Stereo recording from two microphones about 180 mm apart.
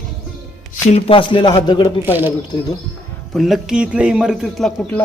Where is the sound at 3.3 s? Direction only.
Centre (ahead or behind).